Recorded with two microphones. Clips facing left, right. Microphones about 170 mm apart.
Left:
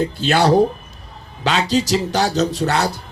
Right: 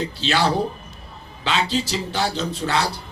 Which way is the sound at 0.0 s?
50° left (ahead or behind).